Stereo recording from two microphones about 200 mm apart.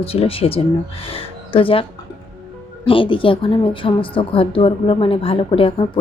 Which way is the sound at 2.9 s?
25° left (ahead or behind).